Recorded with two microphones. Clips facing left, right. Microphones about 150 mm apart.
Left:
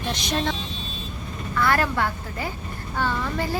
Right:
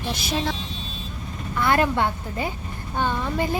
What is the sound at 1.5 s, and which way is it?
A woman's voice, 20° right (ahead or behind).